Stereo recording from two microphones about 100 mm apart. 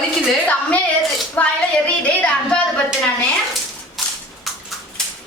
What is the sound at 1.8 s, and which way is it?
Music, 10° left (ahead or behind).